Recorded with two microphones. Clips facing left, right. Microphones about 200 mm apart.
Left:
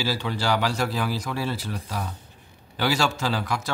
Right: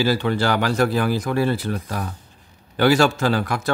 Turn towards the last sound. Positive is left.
turn(degrees=-55)  # may be behind; listen again after turning